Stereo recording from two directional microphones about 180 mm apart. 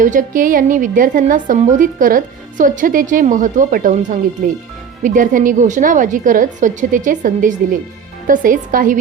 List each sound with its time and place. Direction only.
0.0 s a woman's voice: 45° right (ahead or behind)